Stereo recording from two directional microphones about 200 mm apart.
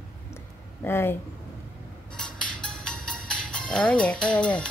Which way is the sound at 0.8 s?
10° left (ahead or behind).